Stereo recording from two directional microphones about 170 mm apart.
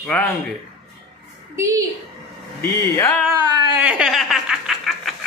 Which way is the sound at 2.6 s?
15° left (ahead or behind).